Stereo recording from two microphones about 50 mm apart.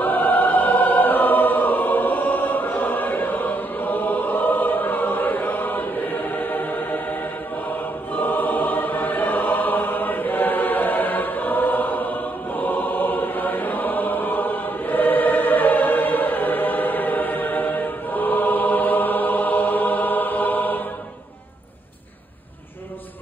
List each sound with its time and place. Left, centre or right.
0.0 s choir: left
8.2 s choir: left